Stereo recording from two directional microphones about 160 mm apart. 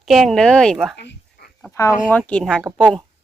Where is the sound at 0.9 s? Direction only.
90° left.